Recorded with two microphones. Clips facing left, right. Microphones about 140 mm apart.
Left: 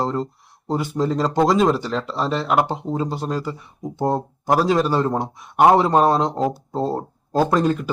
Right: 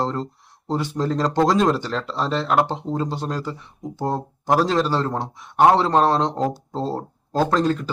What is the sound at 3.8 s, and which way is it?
A man's voice, 15° left (ahead or behind).